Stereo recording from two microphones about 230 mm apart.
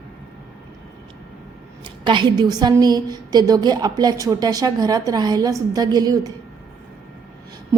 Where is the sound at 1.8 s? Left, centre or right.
Centre.